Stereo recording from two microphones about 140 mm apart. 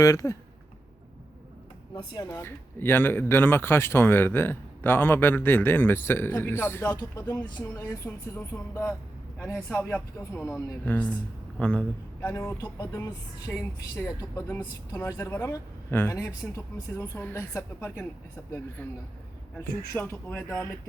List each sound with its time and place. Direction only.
0.0 s a woman's voice: 25° left (ahead or behind)
2.0 s speech: 25° left (ahead or behind)
6.9 s speech: 30° left (ahead or behind)
7.8 s speech: 15° left (ahead or behind)
10.8 s a man's voice: 10° left (ahead or behind)
12.3 s a woman's voice: 20° left (ahead or behind)